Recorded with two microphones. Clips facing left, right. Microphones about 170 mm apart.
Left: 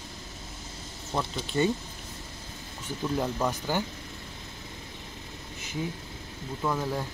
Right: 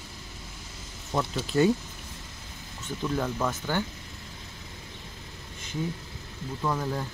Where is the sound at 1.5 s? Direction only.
Centre (ahead or behind).